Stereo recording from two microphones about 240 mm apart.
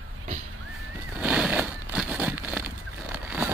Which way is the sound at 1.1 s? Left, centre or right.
Centre.